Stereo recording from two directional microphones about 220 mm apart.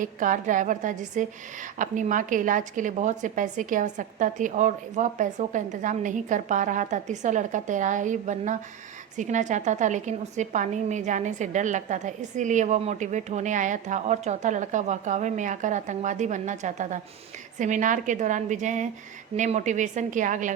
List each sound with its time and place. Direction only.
0.0 s a woman's voice: 35° right (ahead or behind)